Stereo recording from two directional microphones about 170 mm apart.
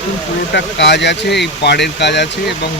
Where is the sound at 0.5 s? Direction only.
90° left.